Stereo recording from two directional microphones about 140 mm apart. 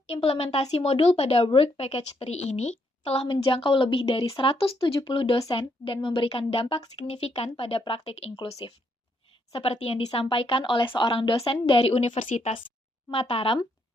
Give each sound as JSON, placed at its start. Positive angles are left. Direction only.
{"t": 0.1, "sound": "a woman's voice", "side_deg": 45}